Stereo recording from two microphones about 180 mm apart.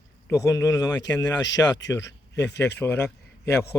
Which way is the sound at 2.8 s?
10° left (ahead or behind).